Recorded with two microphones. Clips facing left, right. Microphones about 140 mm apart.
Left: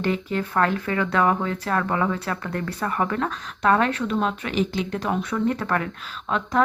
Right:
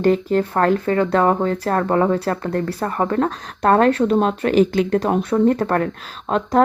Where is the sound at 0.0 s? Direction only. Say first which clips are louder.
Right 8 dB; 40° right (ahead or behind).